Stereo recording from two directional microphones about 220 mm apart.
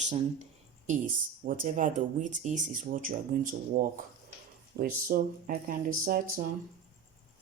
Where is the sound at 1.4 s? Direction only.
40° right (ahead or behind).